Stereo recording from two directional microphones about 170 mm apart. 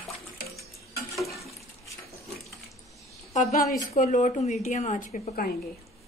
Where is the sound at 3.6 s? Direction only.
60° left (ahead or behind).